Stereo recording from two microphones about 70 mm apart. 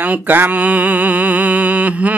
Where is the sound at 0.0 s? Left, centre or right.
Right.